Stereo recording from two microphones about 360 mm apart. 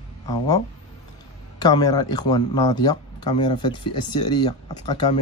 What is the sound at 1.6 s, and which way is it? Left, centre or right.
A man's voice, centre.